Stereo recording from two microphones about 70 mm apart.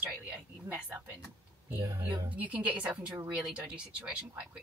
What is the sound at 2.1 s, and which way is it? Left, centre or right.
Speech, right.